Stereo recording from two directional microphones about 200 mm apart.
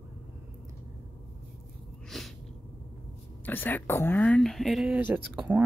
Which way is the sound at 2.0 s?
Centre (ahead or behind).